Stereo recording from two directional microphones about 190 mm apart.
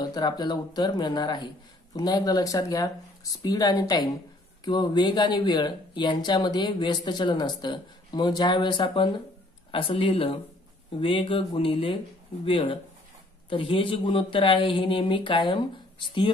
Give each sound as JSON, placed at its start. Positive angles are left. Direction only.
{"t": 0.0, "sound": "speech", "side_deg": 20}